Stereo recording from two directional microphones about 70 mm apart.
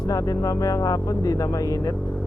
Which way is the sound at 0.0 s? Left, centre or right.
Left.